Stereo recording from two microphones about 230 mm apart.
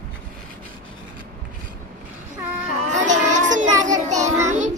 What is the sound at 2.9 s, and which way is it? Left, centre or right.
Child singing, right.